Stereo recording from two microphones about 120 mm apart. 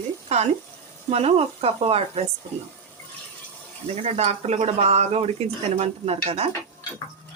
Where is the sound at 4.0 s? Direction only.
65° right (ahead or behind).